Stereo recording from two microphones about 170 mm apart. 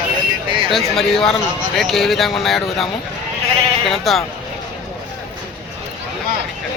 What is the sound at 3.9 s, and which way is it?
Speech, centre (ahead or behind).